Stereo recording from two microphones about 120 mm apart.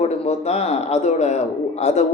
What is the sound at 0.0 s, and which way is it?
A woman's voice, 65° left (ahead or behind).